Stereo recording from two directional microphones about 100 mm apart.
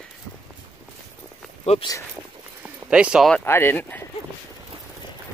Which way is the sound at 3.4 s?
20° left (ahead or behind).